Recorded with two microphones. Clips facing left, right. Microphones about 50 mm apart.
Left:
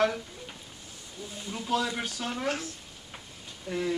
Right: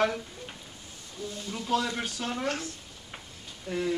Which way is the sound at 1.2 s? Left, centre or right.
Left.